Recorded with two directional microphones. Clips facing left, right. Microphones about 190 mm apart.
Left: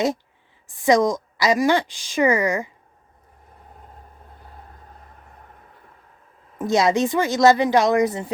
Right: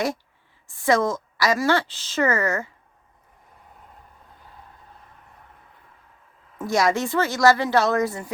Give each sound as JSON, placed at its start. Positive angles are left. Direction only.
{"t": 0.7, "sound": "a woman's voice", "side_deg": 15}
{"t": 6.6, "sound": "a woman's voice", "side_deg": 20}